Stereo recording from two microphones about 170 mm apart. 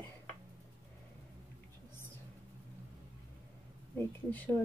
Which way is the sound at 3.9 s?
10° left (ahead or behind).